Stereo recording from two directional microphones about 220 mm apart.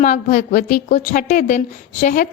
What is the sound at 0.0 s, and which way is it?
A woman's voice, 35° left (ahead or behind).